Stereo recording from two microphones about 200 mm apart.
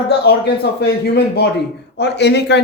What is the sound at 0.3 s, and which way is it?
A man's voice, 55° left (ahead or behind).